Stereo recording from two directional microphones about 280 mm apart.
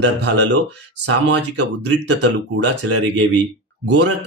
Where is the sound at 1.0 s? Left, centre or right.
Right.